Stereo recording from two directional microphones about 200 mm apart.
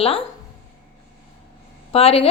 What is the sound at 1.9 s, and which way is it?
Speech, 30° left (ahead or behind).